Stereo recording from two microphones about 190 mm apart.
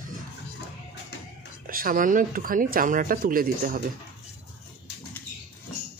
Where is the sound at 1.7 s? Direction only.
50° right (ahead or behind).